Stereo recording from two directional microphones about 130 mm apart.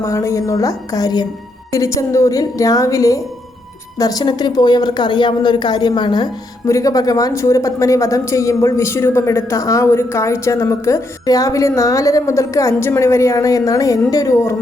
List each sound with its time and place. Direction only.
0.0 s a woman's voice: 20° left (ahead or behind)